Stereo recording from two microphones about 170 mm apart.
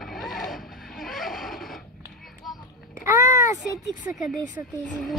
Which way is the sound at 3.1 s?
20° right (ahead or behind).